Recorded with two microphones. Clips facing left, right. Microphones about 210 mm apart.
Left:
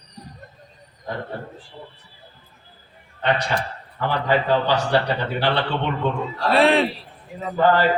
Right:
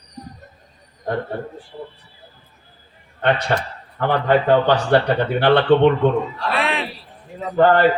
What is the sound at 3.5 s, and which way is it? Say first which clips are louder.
Speech: right 4 dB; 55° right (ahead or behind).